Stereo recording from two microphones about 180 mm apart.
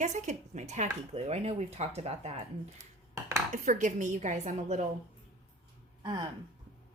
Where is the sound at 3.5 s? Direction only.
45° right (ahead or behind).